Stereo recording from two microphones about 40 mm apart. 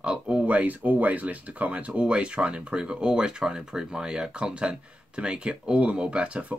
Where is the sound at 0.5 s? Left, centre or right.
Right.